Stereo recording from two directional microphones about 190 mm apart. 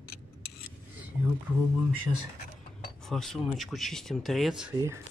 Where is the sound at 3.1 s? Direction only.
Centre (ahead or behind).